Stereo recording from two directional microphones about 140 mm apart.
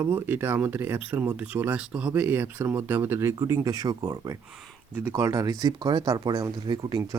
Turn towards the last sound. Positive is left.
turn(degrees=-30)  # may be behind; listen again after turning